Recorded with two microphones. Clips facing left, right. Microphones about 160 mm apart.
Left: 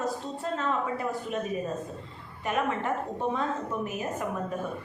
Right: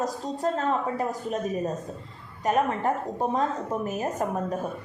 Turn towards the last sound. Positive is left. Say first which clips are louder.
# right 4 dB
turn(degrees=-40)  # may be behind; listen again after turning